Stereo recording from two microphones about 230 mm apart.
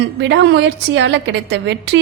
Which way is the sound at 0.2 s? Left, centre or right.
Right.